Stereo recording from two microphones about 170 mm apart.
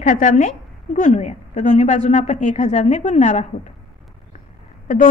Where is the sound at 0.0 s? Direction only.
50° left (ahead or behind).